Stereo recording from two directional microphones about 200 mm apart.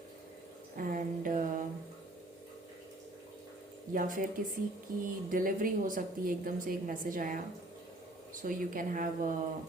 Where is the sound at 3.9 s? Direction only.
45° right (ahead or behind).